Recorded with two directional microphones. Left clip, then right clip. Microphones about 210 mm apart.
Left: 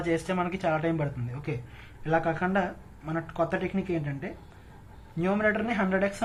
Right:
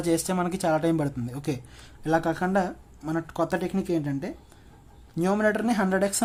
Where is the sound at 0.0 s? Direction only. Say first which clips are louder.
Right 2 dB; 40° right (ahead or behind).